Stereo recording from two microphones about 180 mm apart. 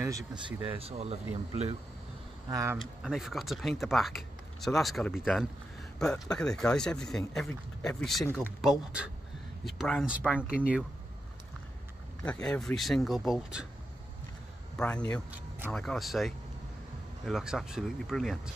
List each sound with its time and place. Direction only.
0.0 s speech: 20° right (ahead or behind)
0.7 s speech: 35° right (ahead or behind)
2.5 s speech: 15° right (ahead or behind)
2.8 s speech: centre (ahead or behind)
12.3 s speech: 5° left (ahead or behind)
14.8 s speech: 10° left (ahead or behind)